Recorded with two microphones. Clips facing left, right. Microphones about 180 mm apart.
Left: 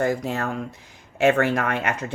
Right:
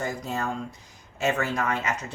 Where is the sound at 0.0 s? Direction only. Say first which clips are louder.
Left 6 dB; 65° left (ahead or behind).